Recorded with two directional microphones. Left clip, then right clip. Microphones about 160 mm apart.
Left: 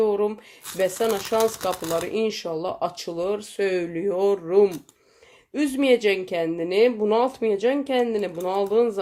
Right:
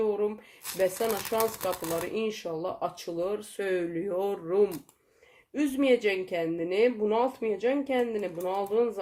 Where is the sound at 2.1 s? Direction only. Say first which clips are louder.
Left 6 dB; 35° left (ahead or behind).